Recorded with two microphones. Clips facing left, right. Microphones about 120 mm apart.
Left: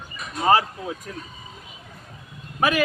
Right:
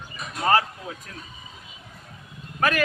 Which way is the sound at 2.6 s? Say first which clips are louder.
Left 2 dB; 15° left (ahead or behind).